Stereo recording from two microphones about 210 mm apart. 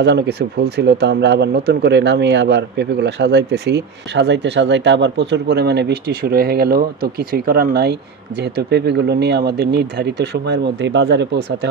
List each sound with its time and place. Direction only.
0.0 s speech: 55° right (ahead or behind)